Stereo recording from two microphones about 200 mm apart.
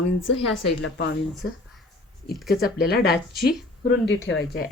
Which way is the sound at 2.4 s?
50° left (ahead or behind).